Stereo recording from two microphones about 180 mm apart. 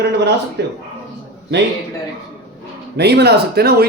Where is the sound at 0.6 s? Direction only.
65° right (ahead or behind).